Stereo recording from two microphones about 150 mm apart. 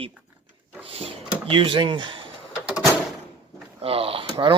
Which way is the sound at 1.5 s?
35° right (ahead or behind).